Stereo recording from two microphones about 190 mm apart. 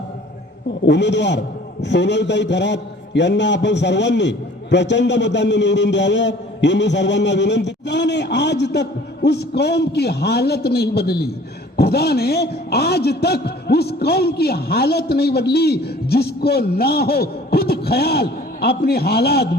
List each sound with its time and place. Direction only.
0.9 s a man's voice: 65° left (ahead or behind)